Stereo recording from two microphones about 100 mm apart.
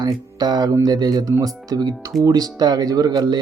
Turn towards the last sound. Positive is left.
turn(degrees=-40)  # may be behind; listen again after turning